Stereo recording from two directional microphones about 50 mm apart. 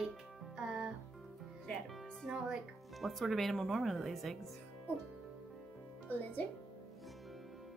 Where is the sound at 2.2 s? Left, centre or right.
Centre.